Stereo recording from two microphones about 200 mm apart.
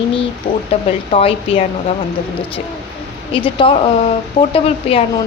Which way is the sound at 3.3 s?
25° left (ahead or behind).